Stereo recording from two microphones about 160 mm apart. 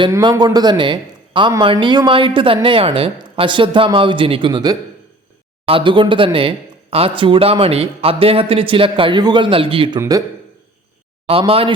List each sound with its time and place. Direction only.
0.1 s a man's voice: 25° right (ahead or behind)
10.0 s speech: 20° right (ahead or behind)
11.3 s a man's voice: 35° right (ahead or behind)